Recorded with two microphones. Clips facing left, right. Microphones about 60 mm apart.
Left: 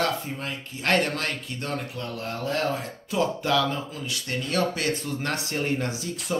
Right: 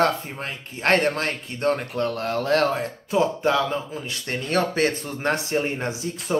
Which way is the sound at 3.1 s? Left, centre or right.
Right.